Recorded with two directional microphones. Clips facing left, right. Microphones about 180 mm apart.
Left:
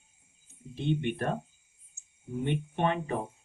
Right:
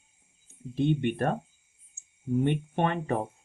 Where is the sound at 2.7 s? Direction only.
50° right (ahead or behind).